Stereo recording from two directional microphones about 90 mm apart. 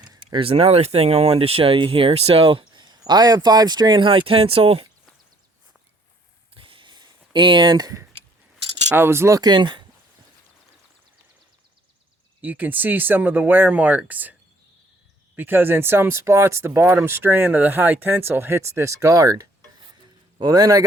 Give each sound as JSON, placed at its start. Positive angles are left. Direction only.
{"t": 0.0, "sound": "a sound", "side_deg": -50}
{"t": 0.3, "sound": "speech", "side_deg": -90}
{"t": 6.5, "sound": "a sound", "side_deg": -80}
{"t": 8.9, "sound": "speech", "side_deg": -25}
{"t": 9.4, "sound": "speech", "side_deg": -55}
{"t": 12.4, "sound": "speech", "side_deg": -20}
{"t": 15.4, "sound": "a man's voice", "side_deg": -20}